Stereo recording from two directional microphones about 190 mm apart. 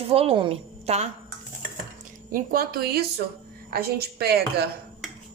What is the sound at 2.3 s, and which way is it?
Speech, 50° right (ahead or behind).